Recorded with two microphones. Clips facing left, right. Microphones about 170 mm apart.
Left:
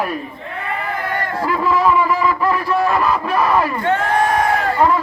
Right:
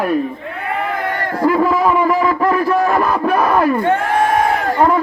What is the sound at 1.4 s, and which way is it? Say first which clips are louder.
A man's voice: right 4 dB; 50° right (ahead or behind).